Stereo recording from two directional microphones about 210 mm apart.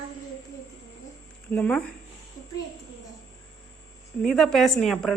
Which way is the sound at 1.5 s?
5° left (ahead or behind).